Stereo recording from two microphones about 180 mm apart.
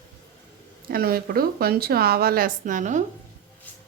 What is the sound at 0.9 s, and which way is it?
A woman's voice, 55° right (ahead or behind).